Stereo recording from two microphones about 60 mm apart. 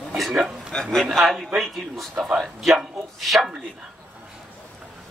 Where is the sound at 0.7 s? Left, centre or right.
Centre.